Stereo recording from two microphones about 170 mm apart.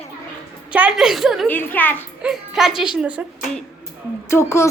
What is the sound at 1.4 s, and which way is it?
Speech, 10° left (ahead or behind).